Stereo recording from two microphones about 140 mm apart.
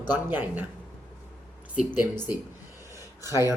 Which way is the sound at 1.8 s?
15° right (ahead or behind).